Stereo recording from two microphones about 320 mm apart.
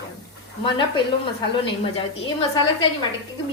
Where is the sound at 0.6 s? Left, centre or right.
Centre.